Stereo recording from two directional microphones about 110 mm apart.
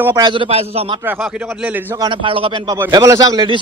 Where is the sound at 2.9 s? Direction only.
30° right (ahead or behind).